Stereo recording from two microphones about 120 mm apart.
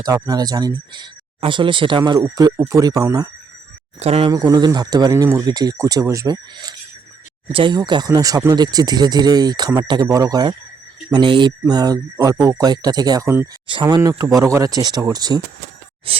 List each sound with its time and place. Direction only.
0.0 s speech: 30° right (ahead or behind)
4.0 s speech: 55° right (ahead or behind)
4.3 s speech: 30° right (ahead or behind)
14.0 s speech: 25° right (ahead or behind)
16.1 s speech: 50° right (ahead or behind)